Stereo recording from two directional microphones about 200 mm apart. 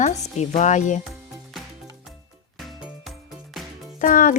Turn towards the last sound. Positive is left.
turn(degrees=40)  # may be behind; listen again after turning